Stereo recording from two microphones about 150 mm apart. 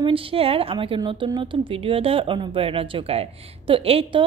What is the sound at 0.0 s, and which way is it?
A woman's voice, 35° right (ahead or behind).